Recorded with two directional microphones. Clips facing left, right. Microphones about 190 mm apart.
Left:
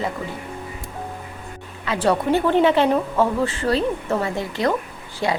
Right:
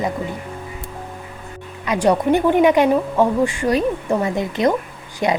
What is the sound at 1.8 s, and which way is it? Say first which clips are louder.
A woman's voice: right 3 dB; 15° right (ahead or behind).